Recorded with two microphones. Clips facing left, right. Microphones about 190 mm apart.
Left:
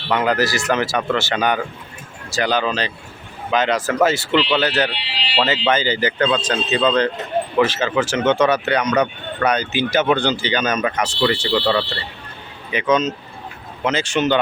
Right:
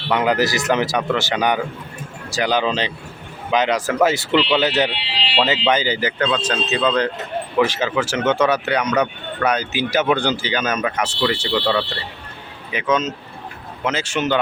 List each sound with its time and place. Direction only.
0.1 s a man's voice: 15° right (ahead or behind)